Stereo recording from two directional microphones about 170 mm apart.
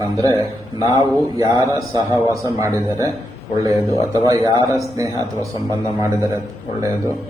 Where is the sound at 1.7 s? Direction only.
20° right (ahead or behind).